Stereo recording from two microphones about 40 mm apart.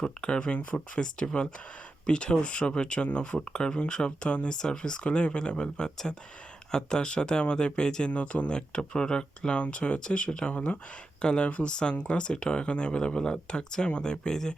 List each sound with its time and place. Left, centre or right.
0.0 s speech: left
8.1 s speech: left